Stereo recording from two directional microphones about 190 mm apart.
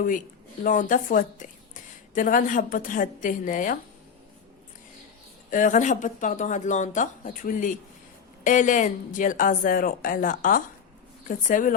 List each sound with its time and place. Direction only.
0.6 s a woman's voice: 45° left (ahead or behind)
5.5 s a woman's voice: 45° left (ahead or behind)